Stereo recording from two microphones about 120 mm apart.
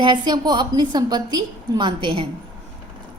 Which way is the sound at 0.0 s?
40° right (ahead or behind).